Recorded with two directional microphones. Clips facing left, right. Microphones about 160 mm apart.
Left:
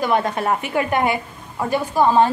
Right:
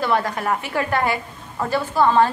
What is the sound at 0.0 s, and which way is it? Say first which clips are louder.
A woman's voice: left 2 dB; 20° left (ahead or behind).